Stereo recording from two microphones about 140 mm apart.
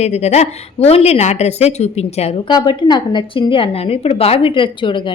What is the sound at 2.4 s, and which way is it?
A woman's voice, 30° left (ahead or behind).